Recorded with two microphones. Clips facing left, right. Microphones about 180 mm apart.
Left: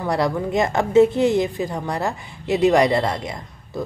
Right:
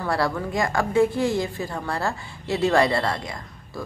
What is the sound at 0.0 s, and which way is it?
A woman's voice, 20° left (ahead or behind).